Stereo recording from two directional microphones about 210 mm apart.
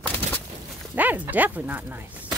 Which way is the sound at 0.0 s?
10° left (ahead or behind).